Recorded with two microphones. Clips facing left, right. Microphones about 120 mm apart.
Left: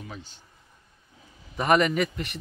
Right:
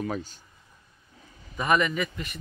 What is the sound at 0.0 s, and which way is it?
Speech, 55° right (ahead or behind).